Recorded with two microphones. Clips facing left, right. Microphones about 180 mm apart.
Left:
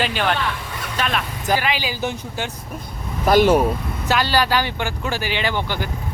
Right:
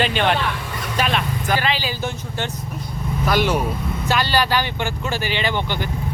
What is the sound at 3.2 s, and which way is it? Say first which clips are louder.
Speech: left 6 dB; 45° left (ahead or behind).